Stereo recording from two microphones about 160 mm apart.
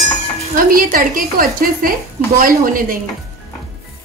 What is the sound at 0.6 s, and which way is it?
A woman's voice, 60° right (ahead or behind).